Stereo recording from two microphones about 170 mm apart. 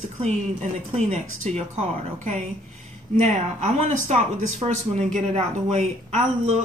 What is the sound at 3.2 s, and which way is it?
Speech, 45° right (ahead or behind).